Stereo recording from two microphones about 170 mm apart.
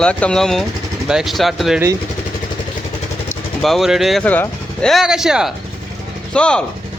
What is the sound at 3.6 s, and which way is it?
Speech, centre (ahead or behind).